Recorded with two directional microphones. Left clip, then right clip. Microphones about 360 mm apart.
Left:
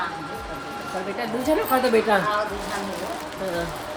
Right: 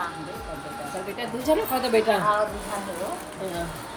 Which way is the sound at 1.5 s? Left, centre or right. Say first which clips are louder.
Even; centre.